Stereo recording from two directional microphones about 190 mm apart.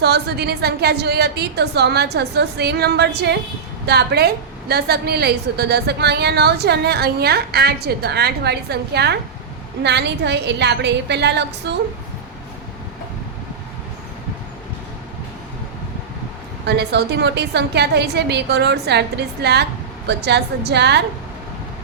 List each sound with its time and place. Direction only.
0.0 s a woman's voice: 60° right (ahead or behind)
16.6 s a woman's voice: 60° right (ahead or behind)